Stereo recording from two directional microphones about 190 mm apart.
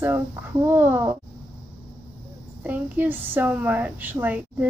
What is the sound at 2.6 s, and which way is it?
A woman's voice, 10° right (ahead or behind).